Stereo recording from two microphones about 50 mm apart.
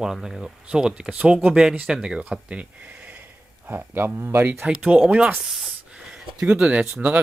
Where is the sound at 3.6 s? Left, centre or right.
Right.